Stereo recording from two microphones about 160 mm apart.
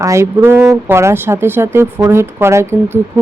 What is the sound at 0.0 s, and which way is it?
Speech, 20° right (ahead or behind).